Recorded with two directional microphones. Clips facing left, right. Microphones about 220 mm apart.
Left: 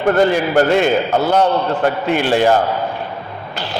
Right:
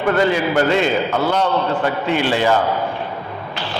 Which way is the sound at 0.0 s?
45° left (ahead or behind).